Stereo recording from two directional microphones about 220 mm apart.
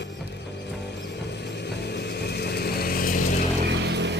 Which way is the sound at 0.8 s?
50° left (ahead or behind).